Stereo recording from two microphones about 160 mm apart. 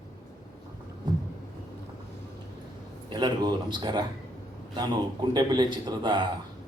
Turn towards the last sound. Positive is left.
turn(degrees=-25)  # may be behind; listen again after turning